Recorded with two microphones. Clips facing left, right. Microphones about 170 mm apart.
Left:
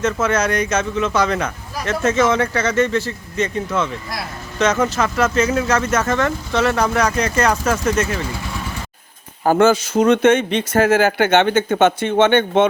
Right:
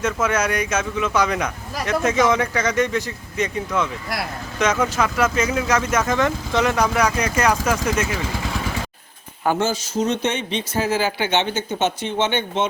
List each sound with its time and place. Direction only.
0.0 s speech: 10° right (ahead or behind)
4.6 s speech: 10° right (ahead or behind)
9.6 s speech: 55° left (ahead or behind)